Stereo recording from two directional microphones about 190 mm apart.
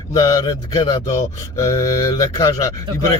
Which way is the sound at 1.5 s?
15° left (ahead or behind).